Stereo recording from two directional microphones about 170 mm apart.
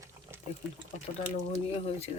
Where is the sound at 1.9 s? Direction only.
35° left (ahead or behind).